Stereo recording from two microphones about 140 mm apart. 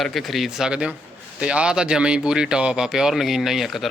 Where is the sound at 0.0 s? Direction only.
Centre (ahead or behind).